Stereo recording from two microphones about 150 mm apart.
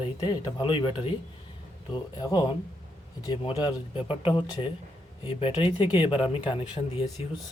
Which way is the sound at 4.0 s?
35° left (ahead or behind).